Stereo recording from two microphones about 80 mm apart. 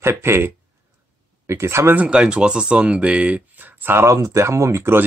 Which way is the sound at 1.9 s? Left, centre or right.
Centre.